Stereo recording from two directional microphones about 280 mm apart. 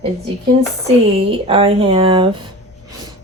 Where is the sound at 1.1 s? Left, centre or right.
Centre.